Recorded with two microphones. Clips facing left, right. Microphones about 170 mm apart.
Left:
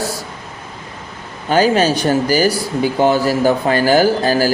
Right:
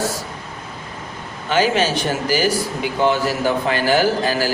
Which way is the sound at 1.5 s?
40° left (ahead or behind).